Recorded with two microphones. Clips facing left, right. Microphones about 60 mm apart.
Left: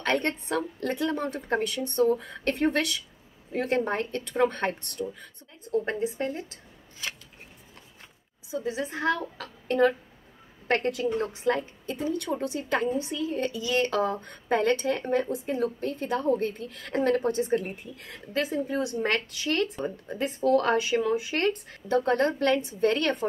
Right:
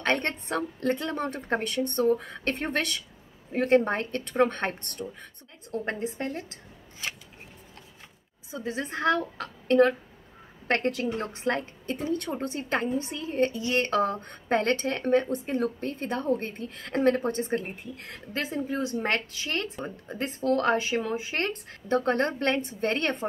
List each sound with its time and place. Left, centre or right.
0.0 s a woman's voice: right
8.5 s a woman's voice: right